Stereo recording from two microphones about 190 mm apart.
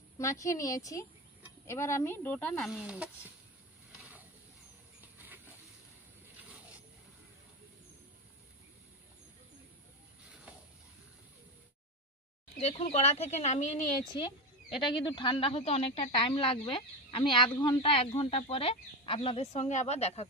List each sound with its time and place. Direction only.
0.2 s speech: 15° left (ahead or behind)
2.7 s speech: 5° right (ahead or behind)
3.9 s a sound: 10° right (ahead or behind)
12.5 s speech: 35° left (ahead or behind)
14.8 s speech: 25° left (ahead or behind)